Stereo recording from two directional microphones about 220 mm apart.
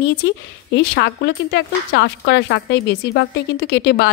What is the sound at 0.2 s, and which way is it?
Speech, 55° left (ahead or behind).